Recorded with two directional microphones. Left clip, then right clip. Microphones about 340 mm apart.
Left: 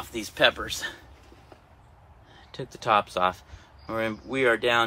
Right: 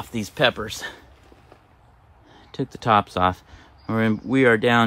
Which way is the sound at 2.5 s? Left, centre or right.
Right.